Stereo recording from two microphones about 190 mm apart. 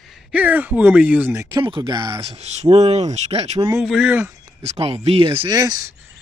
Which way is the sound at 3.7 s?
5° right (ahead or behind).